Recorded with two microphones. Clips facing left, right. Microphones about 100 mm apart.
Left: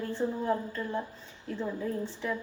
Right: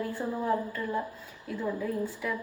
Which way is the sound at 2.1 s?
30° left (ahead or behind).